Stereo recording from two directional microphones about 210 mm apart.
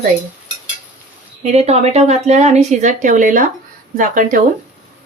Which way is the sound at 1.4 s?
30° right (ahead or behind).